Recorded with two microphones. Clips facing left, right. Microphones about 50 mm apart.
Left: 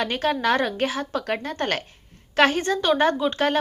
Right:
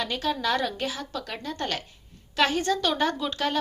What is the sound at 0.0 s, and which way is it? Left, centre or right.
Speech, left.